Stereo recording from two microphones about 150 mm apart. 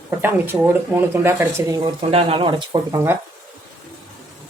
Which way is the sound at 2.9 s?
15° right (ahead or behind).